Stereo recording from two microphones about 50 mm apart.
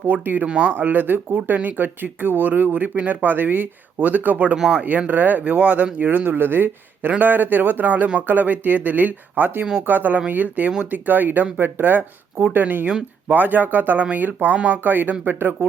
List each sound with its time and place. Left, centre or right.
0.0 s speech: right
0.4 s speech: right
0.8 s speech: right
14.8 s speech: right